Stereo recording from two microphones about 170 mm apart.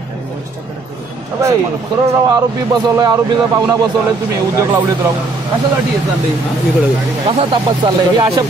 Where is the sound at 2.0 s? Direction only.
20° right (ahead or behind).